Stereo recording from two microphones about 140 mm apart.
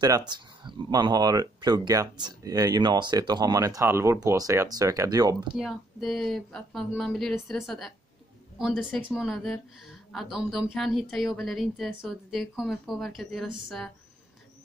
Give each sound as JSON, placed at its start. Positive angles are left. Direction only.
{"t": 0.0, "sound": "speech", "side_deg": -30}
{"t": 5.6, "sound": "a woman's voice", "side_deg": 0}